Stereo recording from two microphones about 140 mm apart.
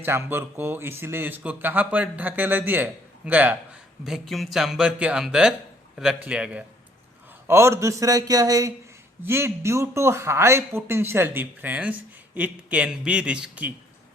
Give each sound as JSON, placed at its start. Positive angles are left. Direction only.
{"t": 0.0, "sound": "speech", "side_deg": -15}
{"t": 4.0, "sound": "speech", "side_deg": 0}
{"t": 7.4, "sound": "speech", "side_deg": -20}